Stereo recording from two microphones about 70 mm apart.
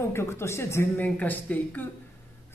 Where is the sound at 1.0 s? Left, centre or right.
Left.